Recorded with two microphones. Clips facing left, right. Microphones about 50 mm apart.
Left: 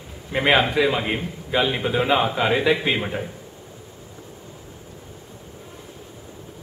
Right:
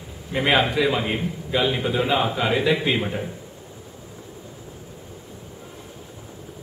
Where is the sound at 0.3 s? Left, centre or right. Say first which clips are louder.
Left 1 dB; centre.